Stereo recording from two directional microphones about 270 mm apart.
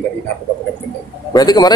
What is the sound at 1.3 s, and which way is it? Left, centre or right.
Speech, centre.